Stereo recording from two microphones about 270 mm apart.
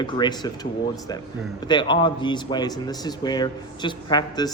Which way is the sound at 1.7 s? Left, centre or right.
Centre.